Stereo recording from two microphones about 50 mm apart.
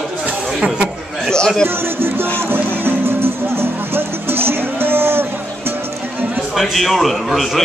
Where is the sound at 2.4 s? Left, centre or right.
Right.